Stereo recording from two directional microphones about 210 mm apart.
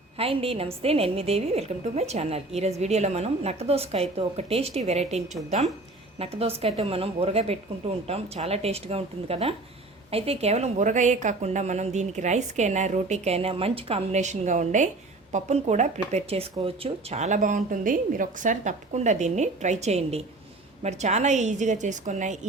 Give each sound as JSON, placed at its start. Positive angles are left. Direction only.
{"t": 0.2, "sound": "a woman's voice", "side_deg": -25}